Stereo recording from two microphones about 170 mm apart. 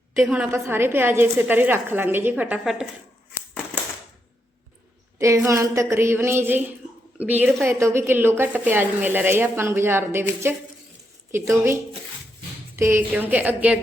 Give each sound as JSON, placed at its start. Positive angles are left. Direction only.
{"t": 0.2, "sound": "a woman's voice", "side_deg": -5}
{"t": 5.2, "sound": "a woman's voice", "side_deg": -15}